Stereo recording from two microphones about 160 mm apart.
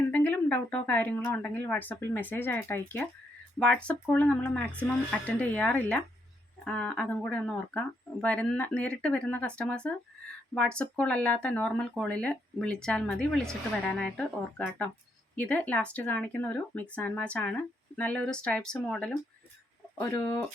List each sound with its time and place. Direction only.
0.1 s speech: 10° left (ahead or behind)